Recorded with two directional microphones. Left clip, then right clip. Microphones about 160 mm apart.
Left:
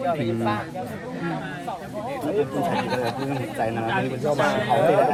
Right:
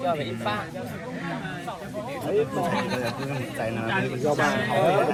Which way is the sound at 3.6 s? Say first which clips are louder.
Left 4 dB; 70° left (ahead or behind).